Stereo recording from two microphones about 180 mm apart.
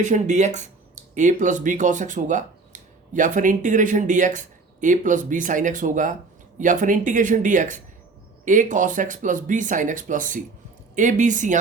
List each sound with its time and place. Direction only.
0.0 s speech: 40° right (ahead or behind)